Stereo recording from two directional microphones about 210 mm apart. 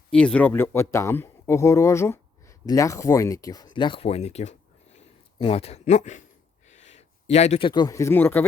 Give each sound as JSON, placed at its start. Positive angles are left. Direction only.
{"t": 0.1, "sound": "speech", "side_deg": 5}